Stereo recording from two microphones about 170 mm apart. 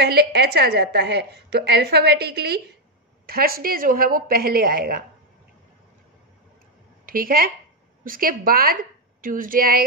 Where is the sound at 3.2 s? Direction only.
60° right (ahead or behind).